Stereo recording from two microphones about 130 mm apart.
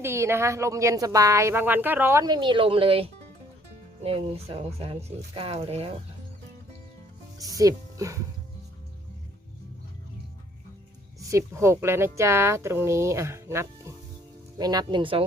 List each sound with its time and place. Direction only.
0.0 s speech: 20° right (ahead or behind)
2.2 s speech: 35° right (ahead or behind)
7.3 s speech: 25° right (ahead or behind)
11.3 s speech: 25° right (ahead or behind); by 15.2 s 40° right (ahead or behind)